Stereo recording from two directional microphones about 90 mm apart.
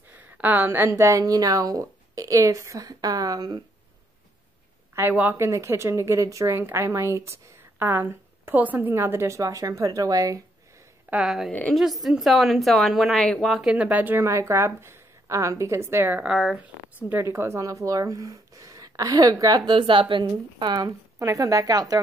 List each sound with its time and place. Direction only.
0.1 s a woman's voice: 20° right (ahead or behind); by 3.6 s 45° right (ahead or behind)
5.1 s speech: 20° right (ahead or behind)
5.4 s a woman's voice: 30° right (ahead or behind)
8.9 s a woman's voice: 30° right (ahead or behind)
11.1 s a woman's voice: 10° right (ahead or behind); by 13.5 s 5° left (ahead or behind)
13.5 s speech: 10° right (ahead or behind)
14.2 s a woman's voice: 35° right (ahead or behind)
16.3 s a woman's voice: centre (ahead or behind)
16.5 s speech: 15° right (ahead or behind)
17.2 s a woman's voice: 30° right (ahead or behind)
19.8 s speech: 70° right (ahead or behind)
21.2 s a woman's voice: 40° right (ahead or behind)